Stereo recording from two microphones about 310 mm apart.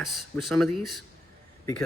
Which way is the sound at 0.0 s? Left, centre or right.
Centre.